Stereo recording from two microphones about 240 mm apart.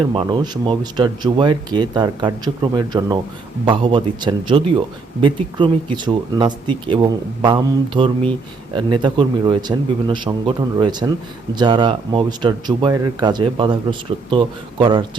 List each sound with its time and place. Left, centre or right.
0.0 s speech: right